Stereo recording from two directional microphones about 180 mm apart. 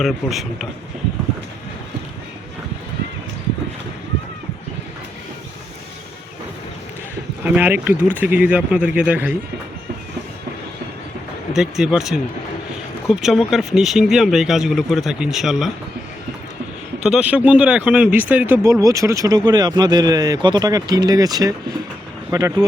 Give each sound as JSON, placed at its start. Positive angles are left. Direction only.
{"t": 0.0, "sound": "speech", "side_deg": 0}
{"t": 7.4, "sound": "speech", "side_deg": -10}
{"t": 11.5, "sound": "speech", "side_deg": -5}
{"t": 17.0, "sound": "speech", "side_deg": -5}